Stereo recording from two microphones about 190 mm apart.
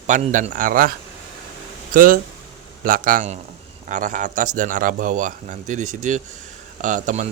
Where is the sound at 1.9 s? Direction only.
50° right (ahead or behind).